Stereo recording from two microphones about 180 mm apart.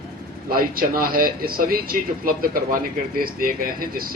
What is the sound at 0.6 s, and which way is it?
Speech, 55° right (ahead or behind).